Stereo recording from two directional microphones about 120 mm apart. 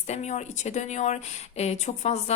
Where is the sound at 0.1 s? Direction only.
70° left (ahead or behind).